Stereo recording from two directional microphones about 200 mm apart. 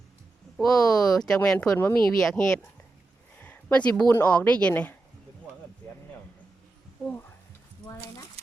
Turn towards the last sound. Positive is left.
turn(degrees=10)  # may be behind; listen again after turning